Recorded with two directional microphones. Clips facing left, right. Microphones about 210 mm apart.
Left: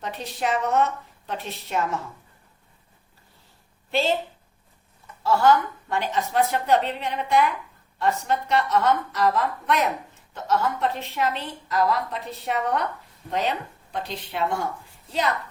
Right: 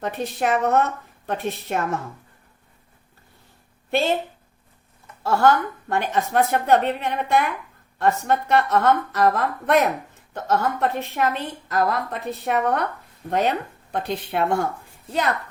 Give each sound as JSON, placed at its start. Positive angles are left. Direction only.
{"t": 0.0, "sound": "a woman's voice", "side_deg": -50}
{"t": 3.9, "sound": "a woman's voice", "side_deg": -55}
{"t": 5.2, "sound": "a woman's voice", "side_deg": -55}